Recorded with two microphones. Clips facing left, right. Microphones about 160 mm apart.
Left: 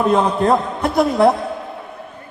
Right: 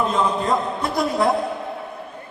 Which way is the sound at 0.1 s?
65° left (ahead or behind).